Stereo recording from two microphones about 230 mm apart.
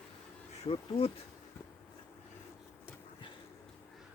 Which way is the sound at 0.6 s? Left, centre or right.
Left.